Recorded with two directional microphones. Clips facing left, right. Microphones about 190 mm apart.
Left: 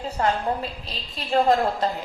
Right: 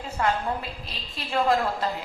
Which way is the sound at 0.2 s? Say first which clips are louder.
Left 2 dB; 35° left (ahead or behind).